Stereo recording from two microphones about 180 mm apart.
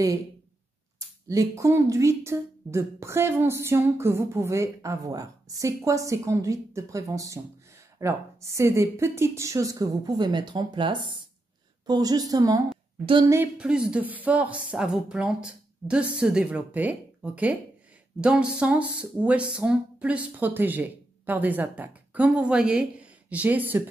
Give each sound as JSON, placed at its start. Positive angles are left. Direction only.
{"t": 0.9, "sound": "a woman's voice", "side_deg": -20}
{"t": 13.3, "sound": "speech", "side_deg": -10}